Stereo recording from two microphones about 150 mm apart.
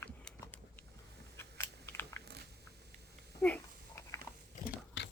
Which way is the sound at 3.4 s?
10° left (ahead or behind).